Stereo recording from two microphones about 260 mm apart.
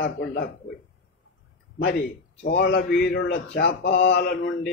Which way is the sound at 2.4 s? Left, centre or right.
Left.